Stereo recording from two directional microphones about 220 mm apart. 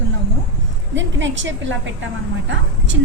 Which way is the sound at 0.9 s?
55° right (ahead or behind).